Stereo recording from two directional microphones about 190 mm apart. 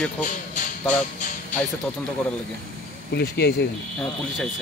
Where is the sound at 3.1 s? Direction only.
60° left (ahead or behind).